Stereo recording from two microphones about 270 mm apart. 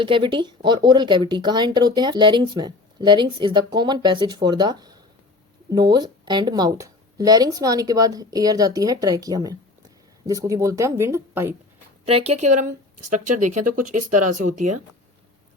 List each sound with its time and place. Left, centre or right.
0.0 s speech: centre
12.0 s speech: right
13.9 s speech: right
14.4 s speech: right